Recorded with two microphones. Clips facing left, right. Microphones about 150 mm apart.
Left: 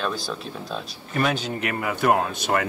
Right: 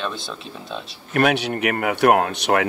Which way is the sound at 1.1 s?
70° right (ahead or behind).